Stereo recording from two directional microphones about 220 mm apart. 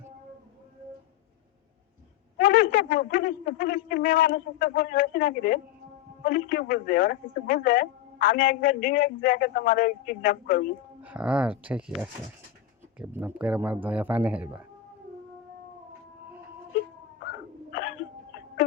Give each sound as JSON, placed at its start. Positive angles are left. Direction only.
{"t": 2.4, "sound": "a man's voice", "side_deg": 40}
{"t": 11.0, "sound": "speech", "side_deg": -5}
{"t": 17.7, "sound": "hiccup", "side_deg": 45}